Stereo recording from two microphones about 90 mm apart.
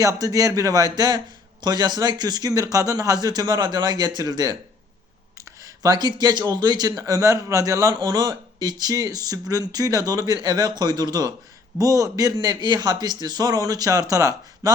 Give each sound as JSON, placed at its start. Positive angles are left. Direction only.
{"t": 0.0, "sound": "speech", "side_deg": -40}
{"t": 5.6, "sound": "speech", "side_deg": -40}